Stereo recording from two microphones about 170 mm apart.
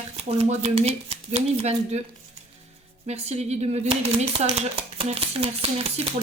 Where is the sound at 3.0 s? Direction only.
40° right (ahead or behind).